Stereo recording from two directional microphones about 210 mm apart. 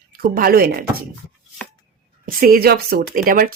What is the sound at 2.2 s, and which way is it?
A woman's voice, 45° right (ahead or behind).